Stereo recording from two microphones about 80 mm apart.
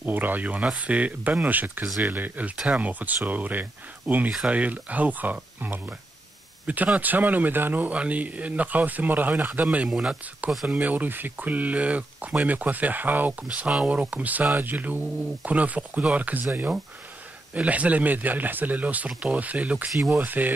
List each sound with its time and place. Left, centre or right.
0.0 s speech: right; by 10.7 s centre
10.7 s speech: right
20.0 s speech: centre
20.2 s speech: right